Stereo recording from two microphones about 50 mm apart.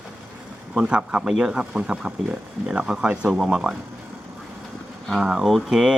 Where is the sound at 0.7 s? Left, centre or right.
Centre.